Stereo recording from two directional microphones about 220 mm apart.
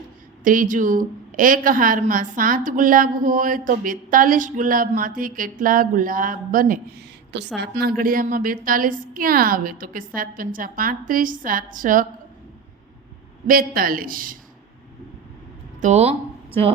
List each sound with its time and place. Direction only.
0.4 s a woman's voice: 35° right (ahead or behind)
13.5 s a woman's voice: 40° right (ahead or behind)
15.8 s speech: 30° right (ahead or behind)